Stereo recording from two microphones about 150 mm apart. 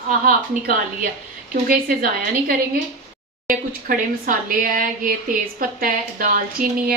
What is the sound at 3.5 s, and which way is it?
Speech, 60° right (ahead or behind).